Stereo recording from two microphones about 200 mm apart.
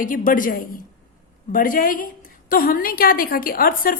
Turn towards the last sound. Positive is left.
turn(degrees=45)  # may be behind; listen again after turning